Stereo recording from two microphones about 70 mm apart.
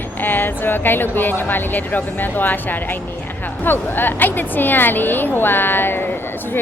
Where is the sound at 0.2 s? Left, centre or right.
Left.